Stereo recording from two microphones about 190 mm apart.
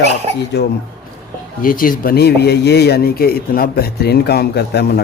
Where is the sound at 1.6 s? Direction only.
45° left (ahead or behind).